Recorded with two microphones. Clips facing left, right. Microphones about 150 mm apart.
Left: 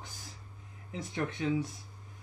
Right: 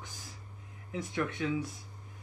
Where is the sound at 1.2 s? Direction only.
35° left (ahead or behind).